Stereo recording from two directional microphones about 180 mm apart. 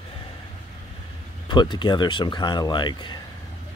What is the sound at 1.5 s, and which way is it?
Speech, 25° left (ahead or behind).